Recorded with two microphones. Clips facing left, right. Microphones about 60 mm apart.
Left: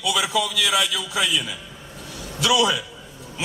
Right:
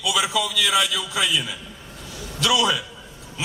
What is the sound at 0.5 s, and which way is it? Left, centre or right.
A man's voice, centre.